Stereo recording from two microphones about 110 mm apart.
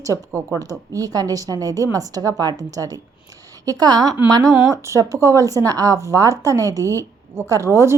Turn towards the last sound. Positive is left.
turn(degrees=-25)  # may be behind; listen again after turning